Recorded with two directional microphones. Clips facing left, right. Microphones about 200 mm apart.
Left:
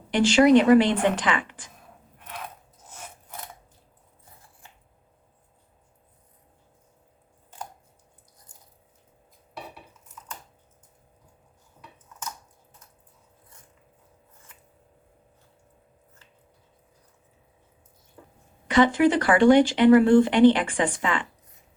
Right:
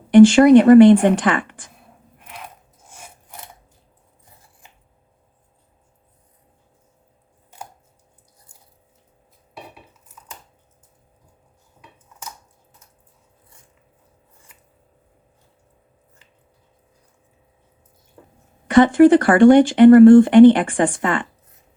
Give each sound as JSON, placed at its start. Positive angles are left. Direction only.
{"t": 0.1, "sound": "speech", "side_deg": -50}
{"t": 2.1, "sound": "a sound", "side_deg": -10}
{"t": 8.5, "sound": "biting", "side_deg": -10}
{"t": 18.7, "sound": "speech", "side_deg": -50}